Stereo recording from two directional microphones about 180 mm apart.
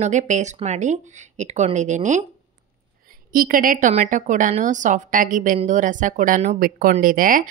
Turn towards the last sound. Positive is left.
turn(degrees=-50)  # may be behind; listen again after turning